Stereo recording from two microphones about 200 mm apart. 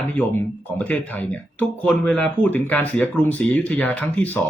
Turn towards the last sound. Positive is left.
turn(degrees=10)  # may be behind; listen again after turning